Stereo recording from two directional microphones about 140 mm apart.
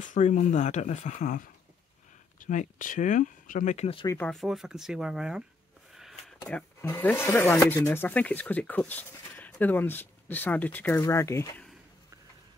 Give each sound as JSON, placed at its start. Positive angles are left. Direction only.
{"t": 0.0, "sound": "speech", "side_deg": 65}
{"t": 2.4, "sound": "speech", "side_deg": 65}
{"t": 4.3, "sound": "speech", "side_deg": 0}
{"t": 5.9, "sound": "a sound", "side_deg": 0}
{"t": 6.5, "sound": "speech", "side_deg": 15}